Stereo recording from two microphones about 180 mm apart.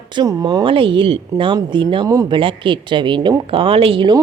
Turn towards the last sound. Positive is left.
turn(degrees=-25)  # may be behind; listen again after turning